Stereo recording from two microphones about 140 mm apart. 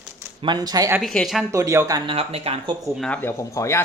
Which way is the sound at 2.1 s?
45° right (ahead or behind).